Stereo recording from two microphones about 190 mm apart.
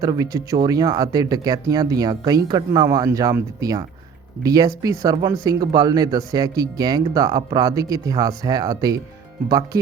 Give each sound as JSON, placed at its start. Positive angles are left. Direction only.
{"t": 0.0, "sound": "speech", "side_deg": -20}